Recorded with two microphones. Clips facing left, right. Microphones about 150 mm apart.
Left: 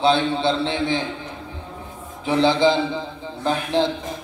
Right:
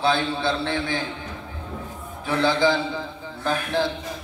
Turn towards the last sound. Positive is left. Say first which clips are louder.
# left 3 dB
turn(degrees=20)  # may be behind; listen again after turning